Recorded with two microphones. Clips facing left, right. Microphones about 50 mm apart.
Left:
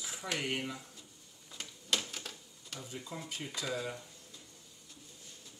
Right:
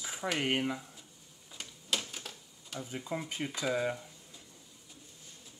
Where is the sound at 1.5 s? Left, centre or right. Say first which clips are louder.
Even; centre.